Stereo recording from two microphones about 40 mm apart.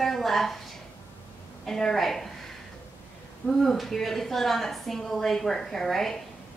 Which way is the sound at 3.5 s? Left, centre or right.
Centre.